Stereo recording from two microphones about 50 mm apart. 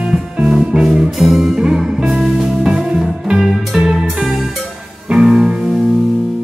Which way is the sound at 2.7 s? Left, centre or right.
Right.